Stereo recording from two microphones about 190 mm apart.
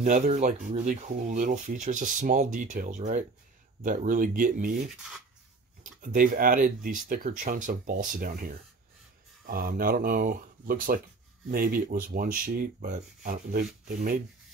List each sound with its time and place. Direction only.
0.0 s speech: 40° right (ahead or behind)
5.9 s speech: 45° right (ahead or behind)